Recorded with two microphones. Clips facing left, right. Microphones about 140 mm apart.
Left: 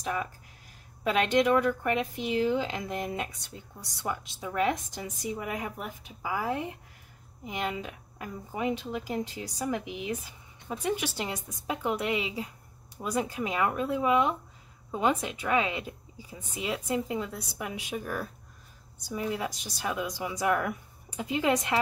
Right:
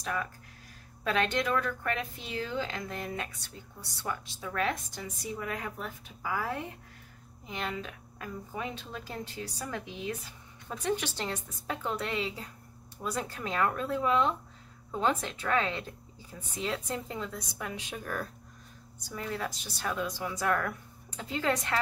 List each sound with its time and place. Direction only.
0.0 s speech: 15° left (ahead or behind)